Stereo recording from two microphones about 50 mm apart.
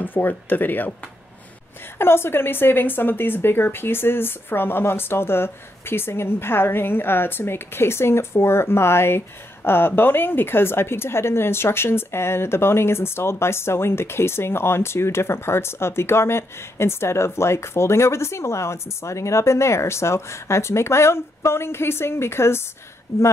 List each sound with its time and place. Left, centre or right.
0.0 s speech: left
2.0 s speech: left